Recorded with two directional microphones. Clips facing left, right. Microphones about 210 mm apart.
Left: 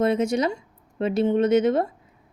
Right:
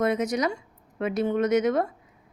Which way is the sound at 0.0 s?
30° left (ahead or behind).